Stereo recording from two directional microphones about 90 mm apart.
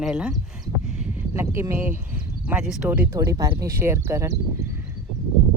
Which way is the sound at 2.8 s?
20° right (ahead or behind).